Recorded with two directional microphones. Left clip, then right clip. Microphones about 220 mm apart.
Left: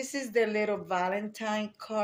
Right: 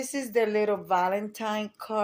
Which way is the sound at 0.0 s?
35° right (ahead or behind).